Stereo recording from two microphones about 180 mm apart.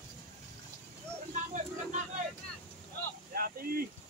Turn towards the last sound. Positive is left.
turn(degrees=-55)  # may be behind; listen again after turning